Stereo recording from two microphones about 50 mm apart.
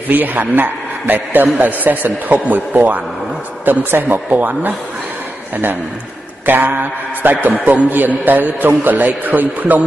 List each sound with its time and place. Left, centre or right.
0.1 s a man's voice: right
6.4 s a man's voice: right
7.5 s a man's voice: right
7.9 s a man's voice: right